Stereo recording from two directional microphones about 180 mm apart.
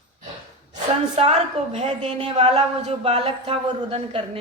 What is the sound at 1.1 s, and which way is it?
A woman's voice, 40° right (ahead or behind).